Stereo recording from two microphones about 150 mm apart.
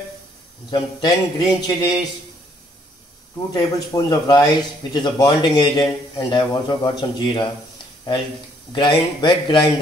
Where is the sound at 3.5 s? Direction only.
25° left (ahead or behind).